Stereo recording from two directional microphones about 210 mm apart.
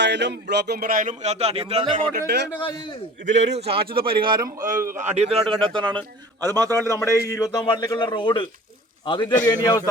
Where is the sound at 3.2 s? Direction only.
35° right (ahead or behind).